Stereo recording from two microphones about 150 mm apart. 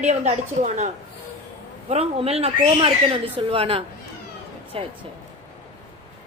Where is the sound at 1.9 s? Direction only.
40° right (ahead or behind).